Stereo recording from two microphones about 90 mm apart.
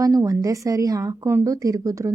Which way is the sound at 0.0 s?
40° right (ahead or behind).